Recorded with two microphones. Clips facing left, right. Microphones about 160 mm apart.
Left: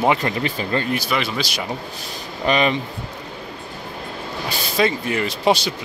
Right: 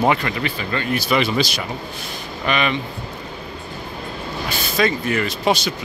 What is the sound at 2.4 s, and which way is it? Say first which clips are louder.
Speech: left 3 dB; 35° left (ahead or behind).